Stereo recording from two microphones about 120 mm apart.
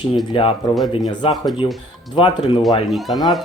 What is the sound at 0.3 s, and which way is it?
Speech, 45° left (ahead or behind).